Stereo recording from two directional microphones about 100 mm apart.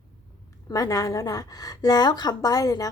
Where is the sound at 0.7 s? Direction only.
35° left (ahead or behind).